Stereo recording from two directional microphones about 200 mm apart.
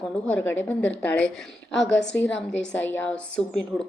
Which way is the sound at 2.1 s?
10° left (ahead or behind).